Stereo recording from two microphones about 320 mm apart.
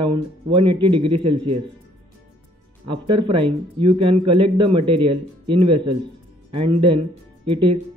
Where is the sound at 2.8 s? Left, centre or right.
Centre.